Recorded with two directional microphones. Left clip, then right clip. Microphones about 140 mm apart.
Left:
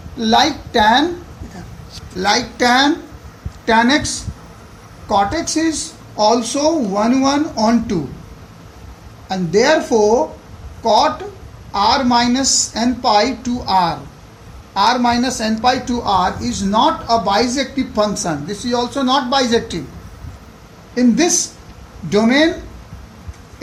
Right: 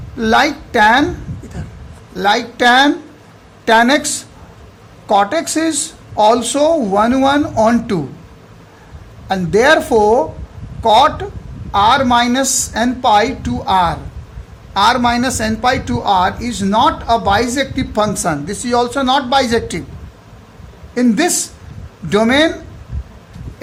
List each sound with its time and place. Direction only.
0.2 s speech: 90° right
2.2 s speech: 90° right
5.1 s speech: 90° right
9.3 s speech: 90° right
11.7 s speech: 90° right
14.7 s a man's voice: 80° right
20.9 s speech: 90° right